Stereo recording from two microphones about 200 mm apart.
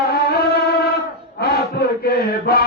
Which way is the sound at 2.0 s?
50° left (ahead or behind).